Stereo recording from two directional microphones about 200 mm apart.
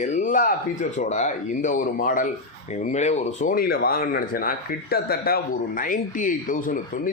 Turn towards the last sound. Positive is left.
turn(degrees=45)  # may be behind; listen again after turning